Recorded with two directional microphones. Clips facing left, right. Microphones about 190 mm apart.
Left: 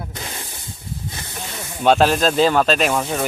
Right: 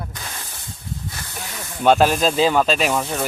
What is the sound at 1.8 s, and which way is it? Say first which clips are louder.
Speech: even; 5° right (ahead or behind).